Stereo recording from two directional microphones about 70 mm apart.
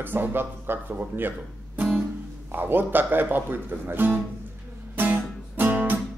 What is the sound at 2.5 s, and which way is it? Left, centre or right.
Music, right.